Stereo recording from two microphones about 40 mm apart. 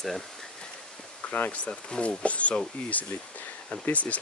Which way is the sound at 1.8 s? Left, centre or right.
Left.